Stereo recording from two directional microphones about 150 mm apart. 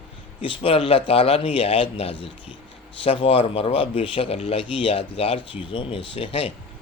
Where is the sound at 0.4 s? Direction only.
40° left (ahead or behind).